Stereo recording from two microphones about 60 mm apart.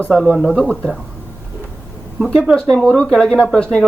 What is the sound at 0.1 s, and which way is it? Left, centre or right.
Speech, centre.